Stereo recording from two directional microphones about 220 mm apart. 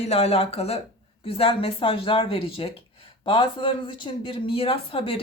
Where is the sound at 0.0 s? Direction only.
25° left (ahead or behind).